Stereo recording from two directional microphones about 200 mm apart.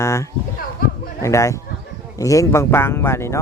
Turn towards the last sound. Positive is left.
turn(degrees=15)  # may be behind; listen again after turning